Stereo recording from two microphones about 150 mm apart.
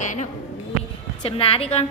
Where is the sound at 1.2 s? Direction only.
40° left (ahead or behind).